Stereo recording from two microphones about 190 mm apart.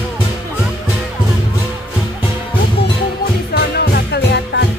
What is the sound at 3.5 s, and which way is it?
Music, 60° left (ahead or behind).